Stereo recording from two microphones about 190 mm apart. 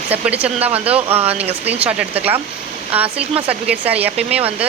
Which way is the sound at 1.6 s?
5° right (ahead or behind).